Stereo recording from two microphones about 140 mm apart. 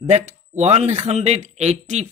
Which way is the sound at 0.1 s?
50° right (ahead or behind).